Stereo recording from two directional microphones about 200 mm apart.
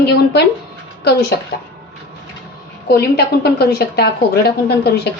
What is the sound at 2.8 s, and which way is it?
A woman's voice, 50° left (ahead or behind).